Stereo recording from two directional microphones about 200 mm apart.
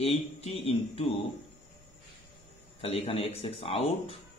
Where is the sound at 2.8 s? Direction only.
30° left (ahead or behind).